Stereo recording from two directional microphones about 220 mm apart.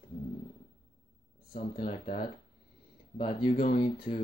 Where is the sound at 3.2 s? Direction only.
35° left (ahead or behind).